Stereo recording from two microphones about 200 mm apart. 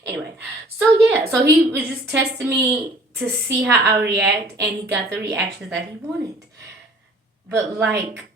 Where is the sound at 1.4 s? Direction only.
10° right (ahead or behind).